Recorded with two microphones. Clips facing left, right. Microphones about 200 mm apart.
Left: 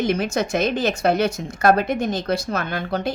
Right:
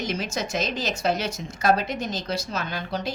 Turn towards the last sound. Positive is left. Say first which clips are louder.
# left 5 dB
turn(degrees=55)  # may be behind; listen again after turning